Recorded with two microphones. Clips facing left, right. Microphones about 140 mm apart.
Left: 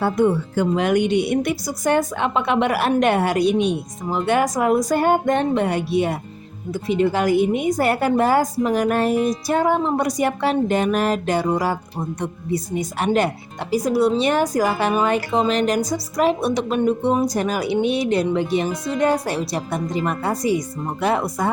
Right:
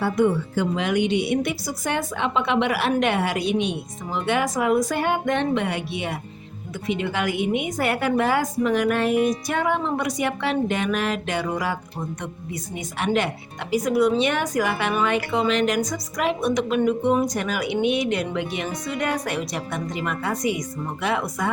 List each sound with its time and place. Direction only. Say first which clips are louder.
0.0 s speech: left 2 dB; 45° left (ahead or behind)